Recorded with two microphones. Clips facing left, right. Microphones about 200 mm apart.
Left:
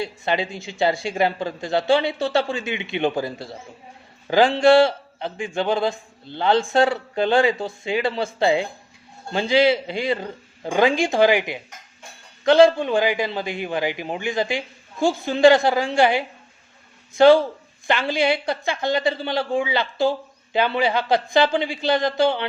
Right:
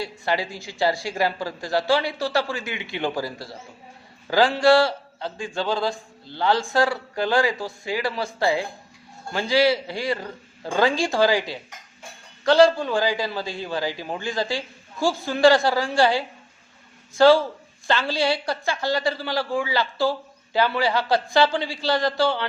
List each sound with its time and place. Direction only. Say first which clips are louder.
0.0 s speech: left 2 dB; 20° left (ahead or behind)